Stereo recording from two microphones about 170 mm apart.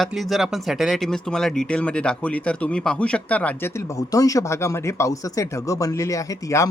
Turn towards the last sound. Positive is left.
turn(degrees=20)  # may be behind; listen again after turning